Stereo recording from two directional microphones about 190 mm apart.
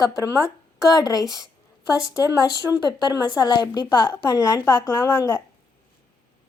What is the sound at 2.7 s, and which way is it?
Speech, 5° right (ahead or behind).